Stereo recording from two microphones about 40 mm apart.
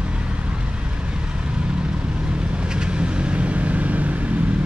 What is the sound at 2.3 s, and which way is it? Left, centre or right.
Vehicle, right.